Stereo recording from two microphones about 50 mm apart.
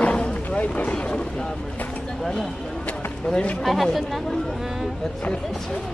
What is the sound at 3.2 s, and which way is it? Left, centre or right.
Speech, centre.